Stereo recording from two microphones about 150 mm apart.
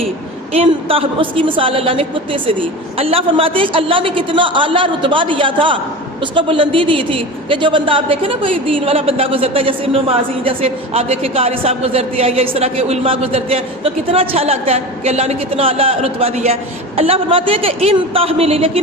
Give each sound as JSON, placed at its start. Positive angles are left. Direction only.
{"t": 0.5, "sound": "a man's voice", "side_deg": -40}